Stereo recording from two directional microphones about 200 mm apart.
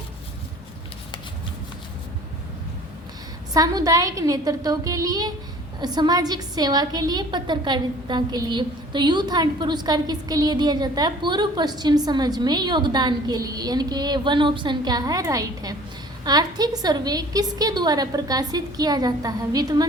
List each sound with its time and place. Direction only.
3.5 s a woman's voice: 20° right (ahead or behind)